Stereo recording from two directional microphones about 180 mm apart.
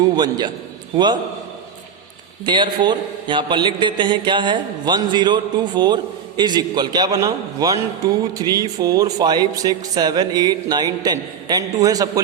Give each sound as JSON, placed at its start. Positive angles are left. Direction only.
{"t": 0.0, "sound": "a man's voice", "side_deg": -25}
{"t": 2.4, "sound": "a man's voice", "side_deg": -25}